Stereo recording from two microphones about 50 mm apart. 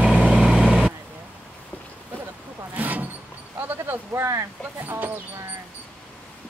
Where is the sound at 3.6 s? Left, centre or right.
Right.